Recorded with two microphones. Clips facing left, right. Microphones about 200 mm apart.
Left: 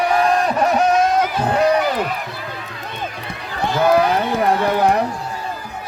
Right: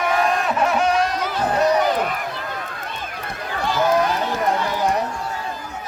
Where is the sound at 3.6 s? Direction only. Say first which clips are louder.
Left 4 dB; 60° left (ahead or behind).